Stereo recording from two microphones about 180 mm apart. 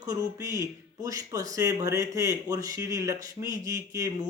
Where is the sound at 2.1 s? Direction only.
20° right (ahead or behind).